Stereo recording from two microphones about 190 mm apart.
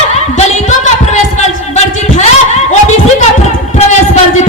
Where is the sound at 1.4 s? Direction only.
35° left (ahead or behind).